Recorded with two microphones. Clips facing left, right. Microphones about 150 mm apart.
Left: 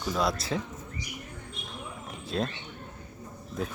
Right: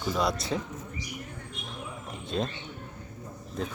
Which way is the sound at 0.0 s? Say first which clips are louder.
Even; centre (ahead or behind).